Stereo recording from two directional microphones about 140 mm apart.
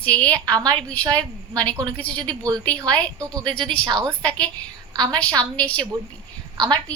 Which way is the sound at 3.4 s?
35° right (ahead or behind).